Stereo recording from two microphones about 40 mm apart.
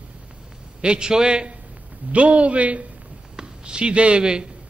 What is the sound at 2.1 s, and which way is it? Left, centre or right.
Speech, right.